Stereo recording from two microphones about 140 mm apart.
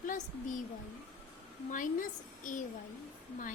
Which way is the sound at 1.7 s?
70° left (ahead or behind).